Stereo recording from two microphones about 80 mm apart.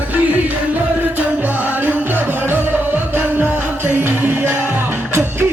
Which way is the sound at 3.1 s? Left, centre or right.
Right.